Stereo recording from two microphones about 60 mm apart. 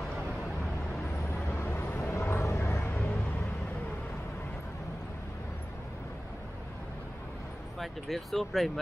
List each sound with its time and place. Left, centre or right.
1.6 s vehicle: left
2.9 s vehicle: left
7.8 s speech: centre